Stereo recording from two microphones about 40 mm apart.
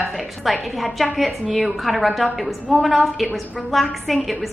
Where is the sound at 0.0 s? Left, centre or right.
Centre.